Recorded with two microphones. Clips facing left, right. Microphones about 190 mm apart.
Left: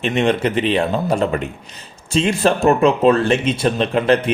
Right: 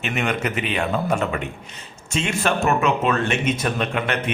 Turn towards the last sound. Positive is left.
turn(degrees=30)  # may be behind; listen again after turning